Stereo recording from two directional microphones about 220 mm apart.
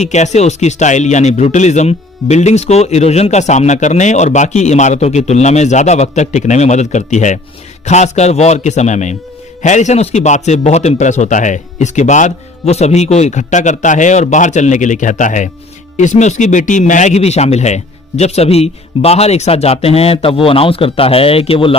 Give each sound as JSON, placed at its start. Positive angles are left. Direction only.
{"t": 0.0, "sound": "speech", "side_deg": 30}